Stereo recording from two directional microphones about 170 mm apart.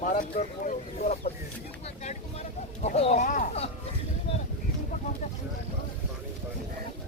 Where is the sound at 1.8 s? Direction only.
40° left (ahead or behind).